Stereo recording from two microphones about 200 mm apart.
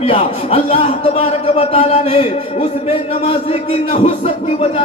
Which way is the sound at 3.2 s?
30° left (ahead or behind).